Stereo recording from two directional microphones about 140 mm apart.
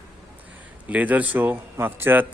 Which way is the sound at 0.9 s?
10° right (ahead or behind).